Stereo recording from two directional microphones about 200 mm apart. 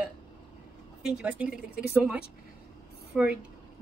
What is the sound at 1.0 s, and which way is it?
Speech, 5° right (ahead or behind).